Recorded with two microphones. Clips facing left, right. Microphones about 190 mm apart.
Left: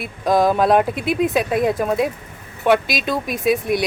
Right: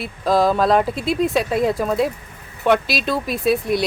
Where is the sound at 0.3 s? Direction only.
20° left (ahead or behind).